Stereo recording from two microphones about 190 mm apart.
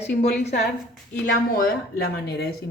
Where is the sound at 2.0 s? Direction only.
60° left (ahead or behind).